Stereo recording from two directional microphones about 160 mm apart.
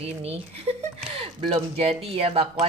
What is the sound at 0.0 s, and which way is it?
Speech, 40° right (ahead or behind).